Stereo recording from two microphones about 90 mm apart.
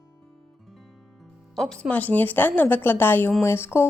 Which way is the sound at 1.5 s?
5° left (ahead or behind).